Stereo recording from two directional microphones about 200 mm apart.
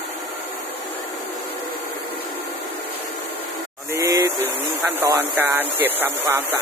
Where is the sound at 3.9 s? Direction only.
15° right (ahead or behind).